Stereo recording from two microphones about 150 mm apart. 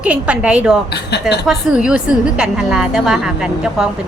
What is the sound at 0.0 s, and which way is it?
Speech, 10° right (ahead or behind).